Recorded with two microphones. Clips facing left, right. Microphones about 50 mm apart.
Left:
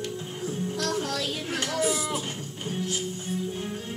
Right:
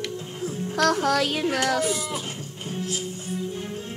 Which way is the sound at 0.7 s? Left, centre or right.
Right.